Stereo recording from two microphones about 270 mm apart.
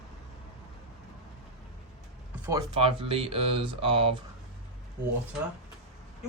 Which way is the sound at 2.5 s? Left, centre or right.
Centre.